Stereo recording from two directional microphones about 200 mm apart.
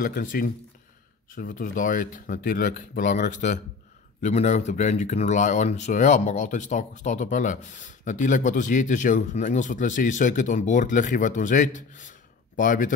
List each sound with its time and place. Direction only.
0.0 s speech: 45° left (ahead or behind)